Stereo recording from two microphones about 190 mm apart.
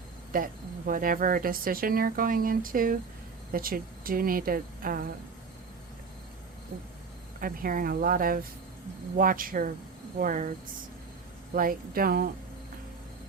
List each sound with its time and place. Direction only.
0.3 s speech: 45° right (ahead or behind)
7.3 s speech: 50° right (ahead or behind)
11.5 s speech: 50° right (ahead or behind)